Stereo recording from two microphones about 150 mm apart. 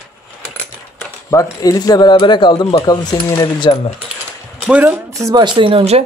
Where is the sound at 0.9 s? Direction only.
20° left (ahead or behind).